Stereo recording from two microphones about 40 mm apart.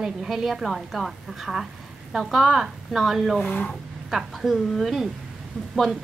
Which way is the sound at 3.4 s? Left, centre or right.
Left.